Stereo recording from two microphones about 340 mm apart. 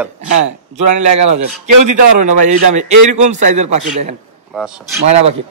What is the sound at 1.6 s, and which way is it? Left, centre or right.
Speech, right.